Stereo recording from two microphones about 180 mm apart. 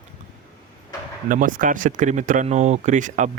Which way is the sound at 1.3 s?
50° right (ahead or behind).